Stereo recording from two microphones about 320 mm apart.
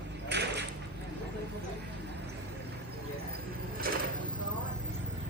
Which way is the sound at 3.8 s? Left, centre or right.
Right.